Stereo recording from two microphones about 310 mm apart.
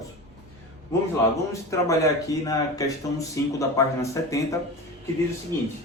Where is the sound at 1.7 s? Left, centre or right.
Centre.